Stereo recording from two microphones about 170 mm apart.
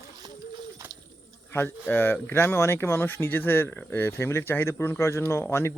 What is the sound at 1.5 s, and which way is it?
Speech, 15° left (ahead or behind).